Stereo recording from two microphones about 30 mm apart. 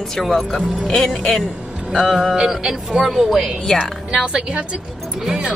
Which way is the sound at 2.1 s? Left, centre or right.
Centre.